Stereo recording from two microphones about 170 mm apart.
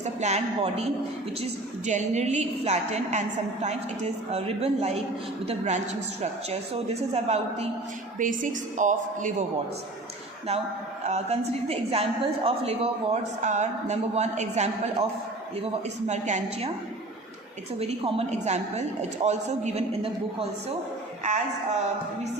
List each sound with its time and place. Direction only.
0.0 s a woman's voice: 40° right (ahead or behind)
1.9 s a woman's voice: 45° right (ahead or behind)
8.2 s a man's voice: 50° right (ahead or behind)
11.0 s a woman's voice: 40° right (ahead or behind)
16.0 s a man's voice: 45° right (ahead or behind)
17.7 s a woman's voice: 35° right (ahead or behind)